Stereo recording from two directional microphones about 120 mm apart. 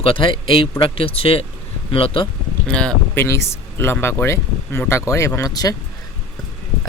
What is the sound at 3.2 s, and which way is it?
Speech, 20° left (ahead or behind).